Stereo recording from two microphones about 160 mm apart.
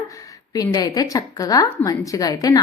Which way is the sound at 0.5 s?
25° left (ahead or behind).